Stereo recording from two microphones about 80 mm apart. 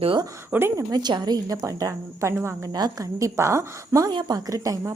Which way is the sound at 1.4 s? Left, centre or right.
Right.